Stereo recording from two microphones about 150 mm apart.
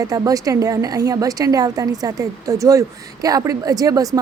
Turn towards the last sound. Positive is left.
turn(degrees=-25)  # may be behind; listen again after turning